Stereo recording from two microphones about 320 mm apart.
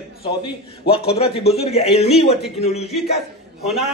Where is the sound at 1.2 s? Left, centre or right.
Centre.